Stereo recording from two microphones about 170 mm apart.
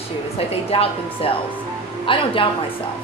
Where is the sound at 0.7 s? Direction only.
30° left (ahead or behind).